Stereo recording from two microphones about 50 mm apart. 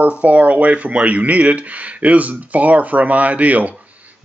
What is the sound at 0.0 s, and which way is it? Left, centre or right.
A man's voice, right.